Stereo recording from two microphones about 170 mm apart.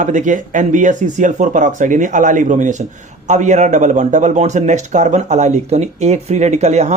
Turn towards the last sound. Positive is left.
turn(degrees=-40)  # may be behind; listen again after turning